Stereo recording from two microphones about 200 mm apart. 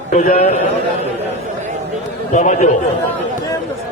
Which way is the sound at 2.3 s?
35° left (ahead or behind).